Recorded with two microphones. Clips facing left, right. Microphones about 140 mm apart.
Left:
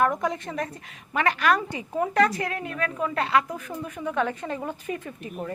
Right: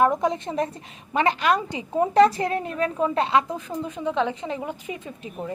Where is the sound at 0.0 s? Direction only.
25° right (ahead or behind).